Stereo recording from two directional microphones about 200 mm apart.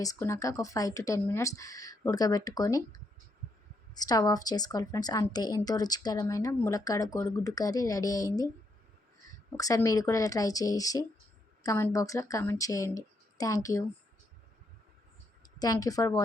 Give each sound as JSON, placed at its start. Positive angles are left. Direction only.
{"t": 0.0, "sound": "a woman's voice", "side_deg": 15}
{"t": 3.9, "sound": "a woman's voice", "side_deg": 20}
{"t": 9.6, "sound": "a woman's voice", "side_deg": 15}
{"t": 15.4, "sound": "a woman's voice", "side_deg": 20}